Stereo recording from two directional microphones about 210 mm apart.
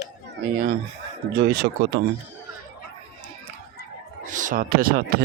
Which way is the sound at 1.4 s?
50° right (ahead or behind).